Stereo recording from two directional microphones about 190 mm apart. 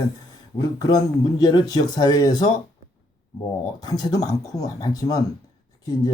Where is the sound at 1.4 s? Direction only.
20° left (ahead or behind).